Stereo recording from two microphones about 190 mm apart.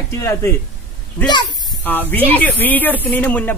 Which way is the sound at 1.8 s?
10° left (ahead or behind).